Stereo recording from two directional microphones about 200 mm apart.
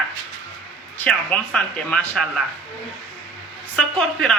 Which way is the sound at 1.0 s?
5° left (ahead or behind).